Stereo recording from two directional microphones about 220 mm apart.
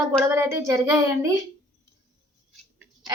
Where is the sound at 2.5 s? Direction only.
Centre (ahead or behind).